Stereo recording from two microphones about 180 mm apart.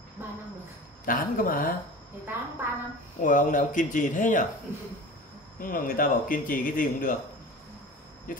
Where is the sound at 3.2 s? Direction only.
45° left (ahead or behind).